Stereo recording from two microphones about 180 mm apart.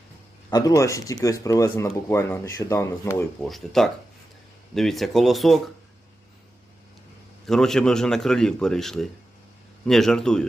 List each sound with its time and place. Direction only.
0.5 s speech: 20° left (ahead or behind)
3.4 s a man's voice: centre (ahead or behind)
7.4 s a man's voice: centre (ahead or behind)